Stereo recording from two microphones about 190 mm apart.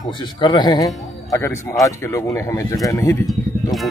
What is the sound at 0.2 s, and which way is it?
A man's voice, 25° left (ahead or behind).